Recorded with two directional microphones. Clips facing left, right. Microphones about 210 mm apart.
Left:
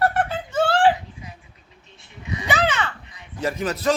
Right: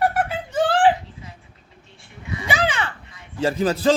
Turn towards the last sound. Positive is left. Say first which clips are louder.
# right 4 dB
turn(degrees=-30)  # may be behind; listen again after turning